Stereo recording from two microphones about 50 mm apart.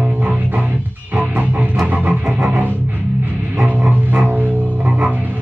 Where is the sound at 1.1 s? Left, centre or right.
Right.